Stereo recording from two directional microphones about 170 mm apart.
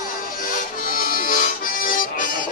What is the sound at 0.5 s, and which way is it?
Music, 55° left (ahead or behind).